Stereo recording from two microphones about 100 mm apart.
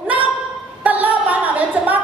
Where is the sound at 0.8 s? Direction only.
15° right (ahead or behind).